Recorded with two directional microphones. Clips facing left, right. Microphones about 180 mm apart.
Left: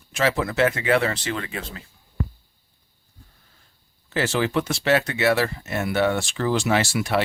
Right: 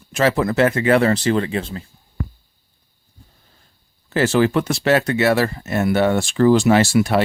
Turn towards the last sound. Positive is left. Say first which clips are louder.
# right 7 dB
turn(degrees=-45)  # may be behind; listen again after turning